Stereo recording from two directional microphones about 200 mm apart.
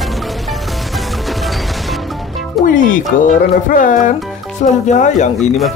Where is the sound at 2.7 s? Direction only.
40° left (ahead or behind).